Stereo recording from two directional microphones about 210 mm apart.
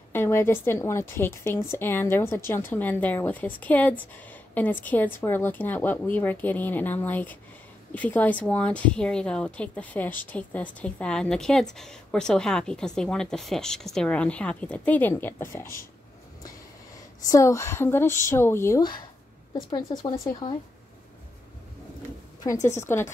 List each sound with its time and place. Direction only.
0.1 s a woman's voice: 10° left (ahead or behind)
17.2 s a woman's voice: 15° left (ahead or behind)
22.7 s a woman's voice: 10° left (ahead or behind)